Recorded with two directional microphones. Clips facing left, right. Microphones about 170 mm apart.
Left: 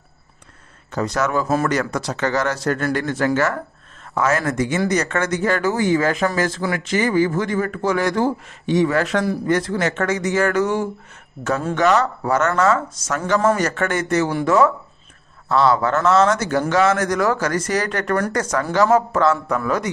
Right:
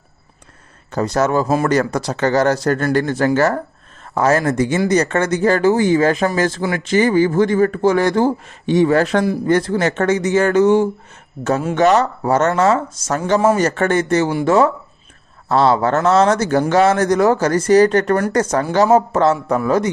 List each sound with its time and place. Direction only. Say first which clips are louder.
0.9 s speech: right 4 dB; 35° right (ahead or behind)